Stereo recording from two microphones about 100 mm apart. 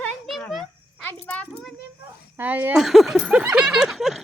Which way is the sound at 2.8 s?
Centre (ahead or behind).